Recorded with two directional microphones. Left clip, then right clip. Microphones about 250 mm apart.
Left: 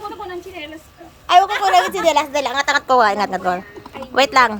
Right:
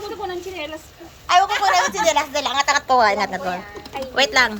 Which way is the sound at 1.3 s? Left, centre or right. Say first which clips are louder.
Left 3 dB; left.